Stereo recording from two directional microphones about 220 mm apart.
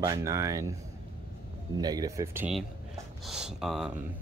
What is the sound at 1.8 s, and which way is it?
Speech, 15° right (ahead or behind).